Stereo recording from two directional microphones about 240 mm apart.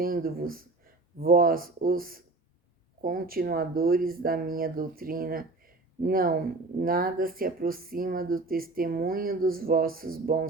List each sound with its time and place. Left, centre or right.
0.0 s speech: right